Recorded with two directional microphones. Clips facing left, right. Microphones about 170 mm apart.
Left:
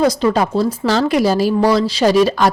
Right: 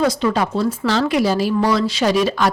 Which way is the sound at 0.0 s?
40° left (ahead or behind).